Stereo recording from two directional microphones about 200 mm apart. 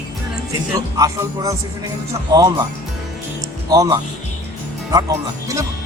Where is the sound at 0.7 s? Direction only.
15° right (ahead or behind).